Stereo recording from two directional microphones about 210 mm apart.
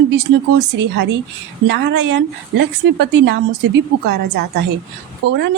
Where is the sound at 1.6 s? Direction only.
55° right (ahead or behind).